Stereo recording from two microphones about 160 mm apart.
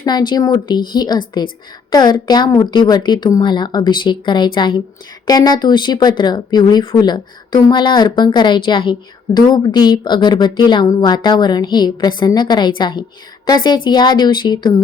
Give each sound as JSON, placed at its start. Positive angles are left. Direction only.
{"t": 0.0, "sound": "speech", "side_deg": 25}